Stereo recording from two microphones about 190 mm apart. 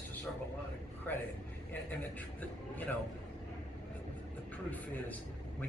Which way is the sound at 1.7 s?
10° left (ahead or behind).